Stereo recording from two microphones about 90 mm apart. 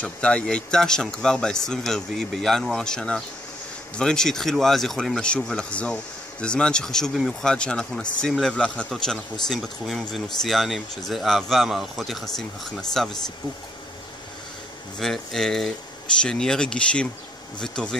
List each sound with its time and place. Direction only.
0.0 s speech: 10° left (ahead or behind)
15.0 s speech: 5° left (ahead or behind)